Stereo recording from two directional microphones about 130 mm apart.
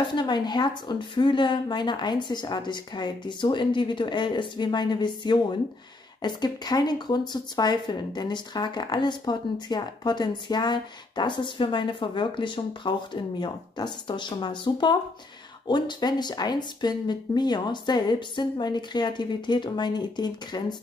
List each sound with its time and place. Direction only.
0.1 s speech: 35° left (ahead or behind)